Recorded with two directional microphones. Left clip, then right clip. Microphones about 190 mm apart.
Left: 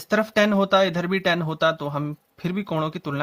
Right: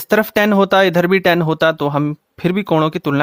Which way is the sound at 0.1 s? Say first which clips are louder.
Right 6 dB; 50° right (ahead or behind).